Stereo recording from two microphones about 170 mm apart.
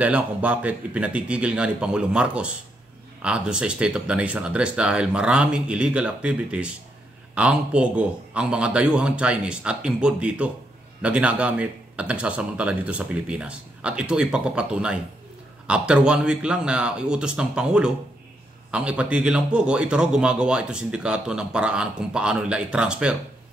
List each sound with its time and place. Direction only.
0.0 s speech: 10° right (ahead or behind)